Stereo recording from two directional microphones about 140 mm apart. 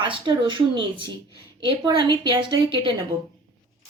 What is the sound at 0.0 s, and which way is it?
Speech, 35° right (ahead or behind).